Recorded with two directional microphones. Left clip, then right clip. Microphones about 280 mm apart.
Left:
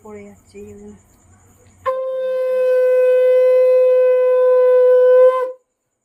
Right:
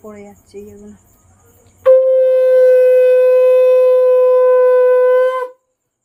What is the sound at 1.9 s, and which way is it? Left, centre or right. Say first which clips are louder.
Wind instrument: right 12 dB; right.